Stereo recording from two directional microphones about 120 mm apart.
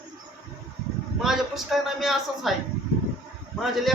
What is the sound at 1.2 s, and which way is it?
A man's voice, 5° right (ahead or behind).